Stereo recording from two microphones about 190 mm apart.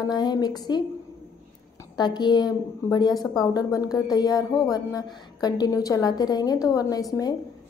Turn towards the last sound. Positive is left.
turn(degrees=20)  # may be behind; listen again after turning